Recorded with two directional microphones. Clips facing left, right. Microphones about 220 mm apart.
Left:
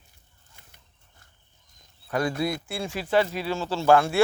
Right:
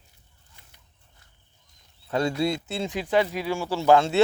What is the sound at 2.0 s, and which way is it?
Speech, 25° right (ahead or behind).